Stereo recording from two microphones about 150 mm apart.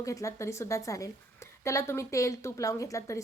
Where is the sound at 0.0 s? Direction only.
20° left (ahead or behind).